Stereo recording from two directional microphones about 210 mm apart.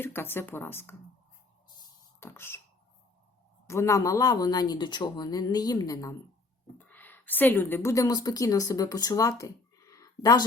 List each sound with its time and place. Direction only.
0.0 s speech: 10° left (ahead or behind)
2.2 s speech: 10° left (ahead or behind)
3.7 s speech: 15° left (ahead or behind)
9.4 s a sound: 15° left (ahead or behind)